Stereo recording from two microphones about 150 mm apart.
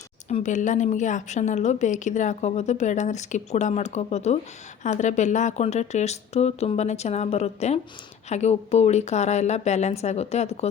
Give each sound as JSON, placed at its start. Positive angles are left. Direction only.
{"t": 0.3, "sound": "a woman's voice", "side_deg": 50}